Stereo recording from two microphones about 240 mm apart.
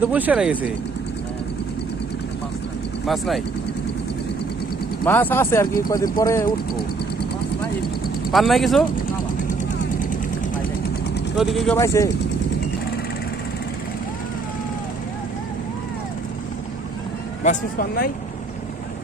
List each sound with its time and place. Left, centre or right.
0.0 s speech: centre
3.1 s speech: centre
5.0 s speech: centre
8.3 s speech: centre
11.3 s speech: centre
11.8 s speech: centre
17.4 s speech: left